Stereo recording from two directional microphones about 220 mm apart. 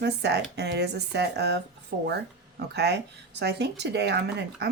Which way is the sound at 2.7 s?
50° right (ahead or behind).